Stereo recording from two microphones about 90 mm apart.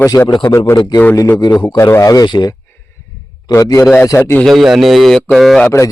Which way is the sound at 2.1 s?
50° left (ahead or behind).